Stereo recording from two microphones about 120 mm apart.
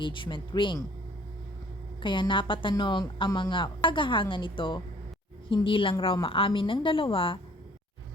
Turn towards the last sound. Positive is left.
turn(degrees=50)  # may be behind; listen again after turning